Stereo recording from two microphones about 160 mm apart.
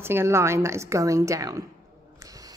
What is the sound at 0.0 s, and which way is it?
A woman's voice, 15° right (ahead or behind).